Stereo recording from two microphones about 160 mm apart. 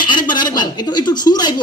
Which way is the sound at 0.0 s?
30° left (ahead or behind).